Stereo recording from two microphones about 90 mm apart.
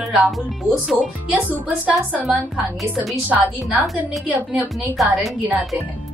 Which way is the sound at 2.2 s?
Centre (ahead or behind).